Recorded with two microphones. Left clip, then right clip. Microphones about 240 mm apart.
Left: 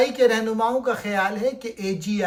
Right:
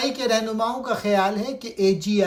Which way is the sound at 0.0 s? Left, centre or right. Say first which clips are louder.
Left 4 dB; centre.